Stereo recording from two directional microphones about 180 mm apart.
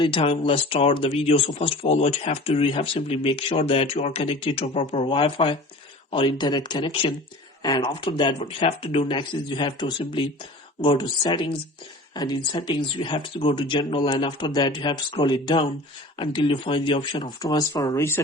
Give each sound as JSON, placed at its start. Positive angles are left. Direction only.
{"t": 0.0, "sound": "speech", "side_deg": 30}